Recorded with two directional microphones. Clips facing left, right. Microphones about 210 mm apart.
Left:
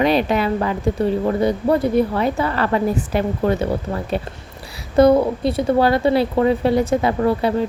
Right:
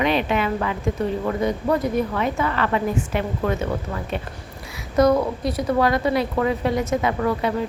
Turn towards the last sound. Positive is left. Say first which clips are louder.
# left 4 dB
turn(degrees=35)  # may be behind; listen again after turning